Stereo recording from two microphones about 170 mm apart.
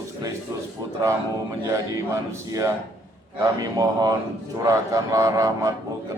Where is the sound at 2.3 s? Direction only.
20° right (ahead or behind).